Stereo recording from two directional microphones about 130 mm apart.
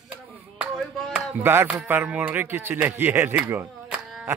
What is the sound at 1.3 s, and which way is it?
A man's voice, 20° right (ahead or behind).